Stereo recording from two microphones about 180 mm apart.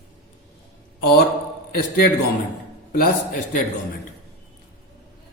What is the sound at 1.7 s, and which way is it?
A man's voice, 60° left (ahead or behind).